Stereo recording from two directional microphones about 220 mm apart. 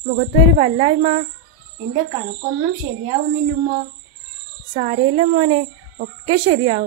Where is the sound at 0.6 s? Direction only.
30° right (ahead or behind).